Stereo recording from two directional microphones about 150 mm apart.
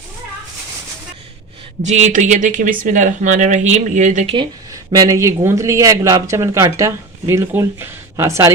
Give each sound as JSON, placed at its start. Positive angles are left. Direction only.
{"t": 1.8, "sound": "speech", "side_deg": -50}
{"t": 4.4, "sound": "speech", "side_deg": -25}